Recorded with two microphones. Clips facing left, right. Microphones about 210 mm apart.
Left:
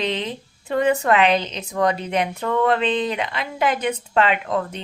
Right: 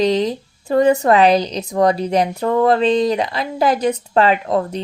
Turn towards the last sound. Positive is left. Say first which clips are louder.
# right 5 dB
turn(degrees=-35)  # may be behind; listen again after turning